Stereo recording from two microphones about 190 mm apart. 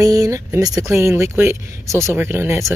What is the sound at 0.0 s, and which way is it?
Speech, 20° right (ahead or behind).